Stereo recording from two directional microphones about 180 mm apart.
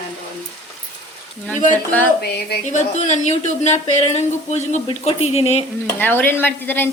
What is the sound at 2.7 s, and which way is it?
Speech, 40° left (ahead or behind).